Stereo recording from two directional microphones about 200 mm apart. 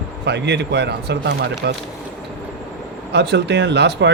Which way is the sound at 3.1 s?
55° right (ahead or behind).